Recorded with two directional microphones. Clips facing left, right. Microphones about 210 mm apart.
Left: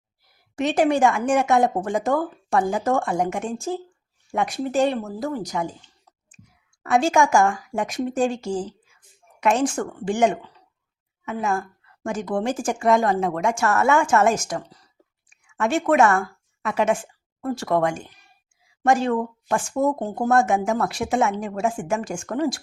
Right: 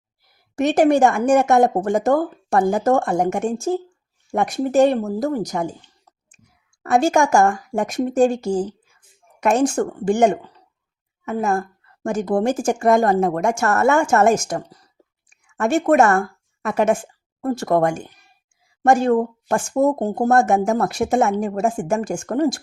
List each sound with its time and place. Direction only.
0.5 s speech: 45° right (ahead or behind)
6.8 s speech: 40° right (ahead or behind)